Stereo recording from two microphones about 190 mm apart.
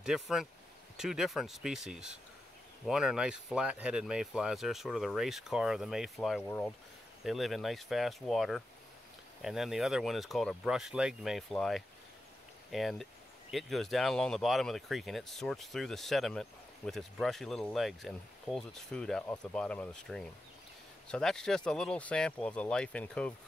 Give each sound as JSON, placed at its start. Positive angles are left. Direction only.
{"t": 0.0, "sound": "speech", "side_deg": -5}